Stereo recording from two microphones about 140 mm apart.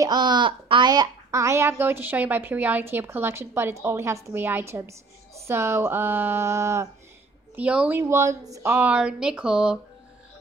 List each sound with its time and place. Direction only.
0.0 s speech: 30° right (ahead or behind)
7.5 s speech: 10° right (ahead or behind)
8.7 s speech: 10° right (ahead or behind)